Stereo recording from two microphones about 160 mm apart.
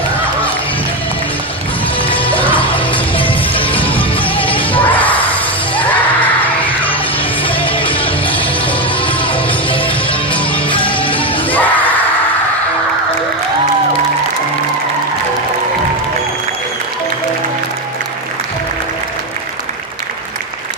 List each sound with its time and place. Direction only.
2.5 s music: 35° left (ahead or behind)
3.7 s music: 10° left (ahead or behind)
4.4 s music: 35° left (ahead or behind)
4.8 s a sound: 10° left (ahead or behind)
5.3 s music: 10° left (ahead or behind)
7.4 s music: 35° left (ahead or behind)
8.3 s music: 10° left (ahead or behind)
9.0 s music: 35° left (ahead or behind)
11.5 s a sound: 10° left (ahead or behind)